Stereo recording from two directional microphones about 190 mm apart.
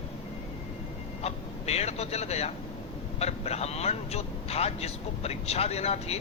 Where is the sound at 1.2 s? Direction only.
35° left (ahead or behind).